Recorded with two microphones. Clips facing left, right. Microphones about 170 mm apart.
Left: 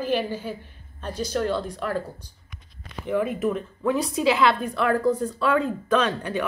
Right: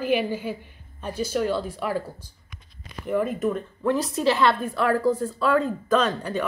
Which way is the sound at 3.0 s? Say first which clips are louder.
Even; 5° left (ahead or behind).